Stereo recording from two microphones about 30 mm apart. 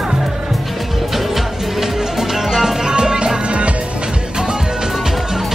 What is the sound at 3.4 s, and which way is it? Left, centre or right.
Music, right.